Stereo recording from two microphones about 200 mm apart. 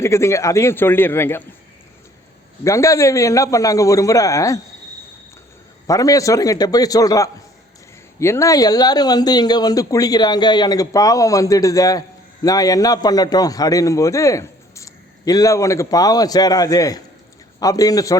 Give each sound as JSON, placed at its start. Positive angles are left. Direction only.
{"t": 0.0, "sound": "speech", "side_deg": 15}
{"t": 2.6, "sound": "speech", "side_deg": 15}
{"t": 5.9, "sound": "speech", "side_deg": 15}